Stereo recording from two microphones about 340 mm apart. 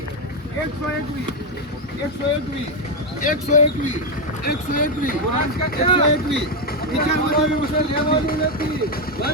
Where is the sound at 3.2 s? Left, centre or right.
Left.